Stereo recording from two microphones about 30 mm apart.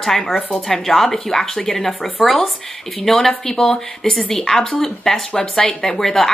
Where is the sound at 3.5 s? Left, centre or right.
Centre.